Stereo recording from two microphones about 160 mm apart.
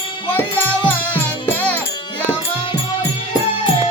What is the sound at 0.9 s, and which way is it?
Music, 10° left (ahead or behind).